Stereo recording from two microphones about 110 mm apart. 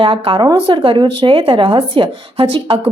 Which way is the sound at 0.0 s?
55° right (ahead or behind).